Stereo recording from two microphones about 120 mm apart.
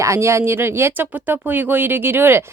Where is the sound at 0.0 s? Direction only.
25° right (ahead or behind).